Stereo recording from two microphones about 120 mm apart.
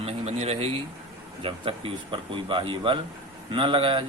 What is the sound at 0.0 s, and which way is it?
Speech, 60° right (ahead or behind).